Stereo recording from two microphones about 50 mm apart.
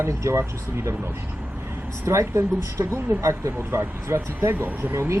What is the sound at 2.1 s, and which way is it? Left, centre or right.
Speech, right.